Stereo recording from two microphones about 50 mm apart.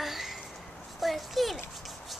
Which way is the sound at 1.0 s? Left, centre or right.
Centre.